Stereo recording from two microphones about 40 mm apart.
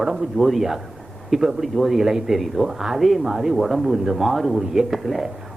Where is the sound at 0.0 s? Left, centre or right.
Centre.